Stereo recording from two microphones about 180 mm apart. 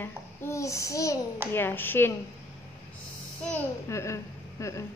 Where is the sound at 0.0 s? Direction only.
15° left (ahead or behind).